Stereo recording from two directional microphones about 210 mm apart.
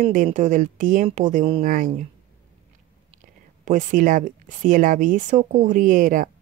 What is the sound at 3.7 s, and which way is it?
Speech, 35° right (ahead or behind).